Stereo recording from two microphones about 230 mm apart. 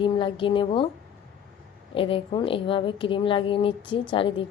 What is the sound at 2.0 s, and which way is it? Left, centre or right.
A woman's voice, left.